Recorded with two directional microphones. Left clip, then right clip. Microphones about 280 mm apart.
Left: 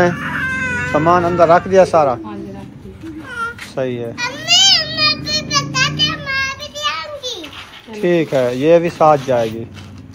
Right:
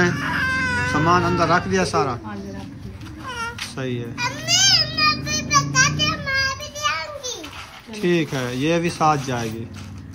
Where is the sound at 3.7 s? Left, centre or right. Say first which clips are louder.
Left 12 dB; centre.